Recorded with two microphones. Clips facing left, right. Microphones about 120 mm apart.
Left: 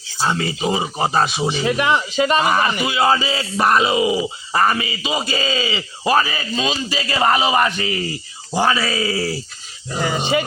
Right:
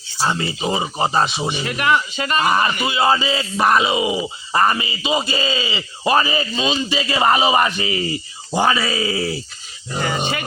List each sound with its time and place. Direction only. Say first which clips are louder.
0.3 s speech: left 1 dB; centre (ahead or behind)
1.6 s speech: left 1 dB; 20° left (ahead or behind)
2.1 s speech: left 2 dB; 5° left (ahead or behind); by 9.4 s 15° right (ahead or behind)
10.0 s speech: left 1 dB; 5° left (ahead or behind)